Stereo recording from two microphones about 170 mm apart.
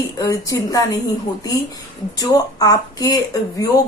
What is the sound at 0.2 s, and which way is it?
Speech, 20° left (ahead or behind).